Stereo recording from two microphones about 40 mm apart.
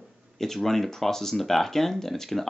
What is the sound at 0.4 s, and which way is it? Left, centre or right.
Speech, centre.